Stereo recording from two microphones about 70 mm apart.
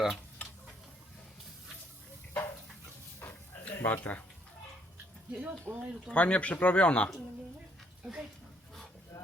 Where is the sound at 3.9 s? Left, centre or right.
Left.